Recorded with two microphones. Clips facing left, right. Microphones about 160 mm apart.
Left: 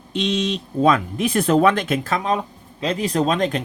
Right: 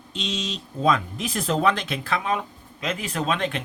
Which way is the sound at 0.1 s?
55° left (ahead or behind).